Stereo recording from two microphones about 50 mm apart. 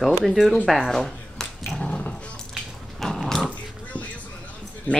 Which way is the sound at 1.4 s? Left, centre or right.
Centre.